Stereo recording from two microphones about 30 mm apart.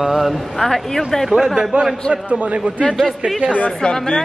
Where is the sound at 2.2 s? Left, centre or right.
Right.